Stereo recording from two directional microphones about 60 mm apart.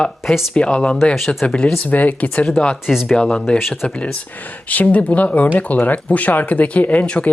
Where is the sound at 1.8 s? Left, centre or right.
Left.